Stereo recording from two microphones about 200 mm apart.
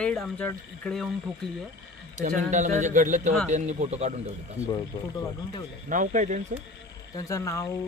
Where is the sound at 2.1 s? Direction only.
35° right (ahead or behind).